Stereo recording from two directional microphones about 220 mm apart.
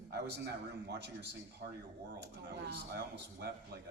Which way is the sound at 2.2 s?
50° right (ahead or behind).